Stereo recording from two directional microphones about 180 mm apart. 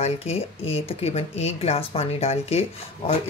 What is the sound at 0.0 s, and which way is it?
Speech, 35° left (ahead or behind).